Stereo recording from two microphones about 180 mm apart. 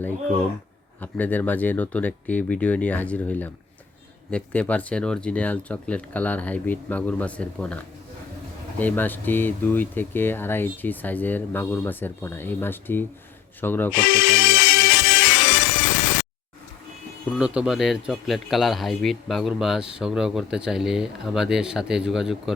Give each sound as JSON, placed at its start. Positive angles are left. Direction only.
{"t": 1.0, "sound": "speech", "side_deg": 10}
{"t": 13.9, "sound": "music", "side_deg": 90}
{"t": 17.3, "sound": "speech", "side_deg": -5}